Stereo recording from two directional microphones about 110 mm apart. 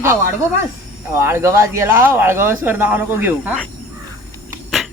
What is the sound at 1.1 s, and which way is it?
Speech, 25° right (ahead or behind).